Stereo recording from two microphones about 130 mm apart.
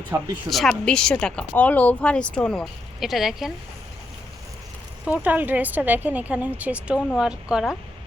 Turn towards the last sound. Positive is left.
turn(degrees=-5)  # may be behind; listen again after turning